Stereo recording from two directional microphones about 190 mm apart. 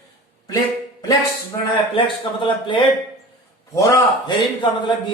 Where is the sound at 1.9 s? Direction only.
25° left (ahead or behind).